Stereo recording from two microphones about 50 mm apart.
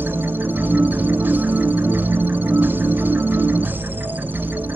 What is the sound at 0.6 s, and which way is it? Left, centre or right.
Music, right.